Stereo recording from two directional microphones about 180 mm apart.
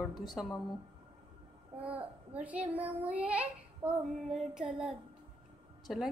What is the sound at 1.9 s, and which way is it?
A child's voice, 10° right (ahead or behind).